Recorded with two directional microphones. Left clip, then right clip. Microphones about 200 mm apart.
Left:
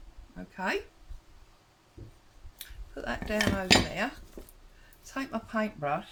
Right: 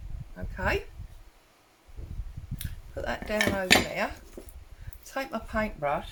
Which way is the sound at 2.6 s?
15° right (ahead or behind).